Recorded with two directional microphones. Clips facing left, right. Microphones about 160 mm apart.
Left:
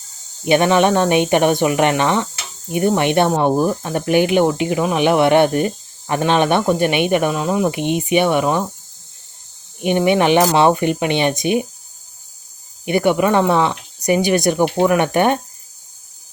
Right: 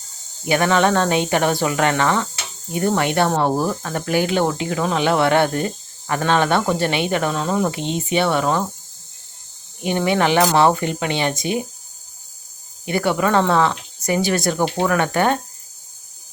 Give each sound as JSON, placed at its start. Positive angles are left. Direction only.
{"t": 0.4, "sound": "speech", "side_deg": 20}
{"t": 9.8, "sound": "speech", "side_deg": 20}
{"t": 12.8, "sound": "speech", "side_deg": 20}